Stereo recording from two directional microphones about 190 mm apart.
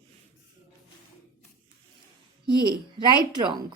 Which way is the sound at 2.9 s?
25° right (ahead or behind).